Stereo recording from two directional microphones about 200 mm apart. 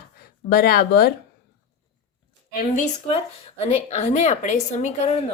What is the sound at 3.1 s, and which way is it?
A woman's voice, 30° left (ahead or behind).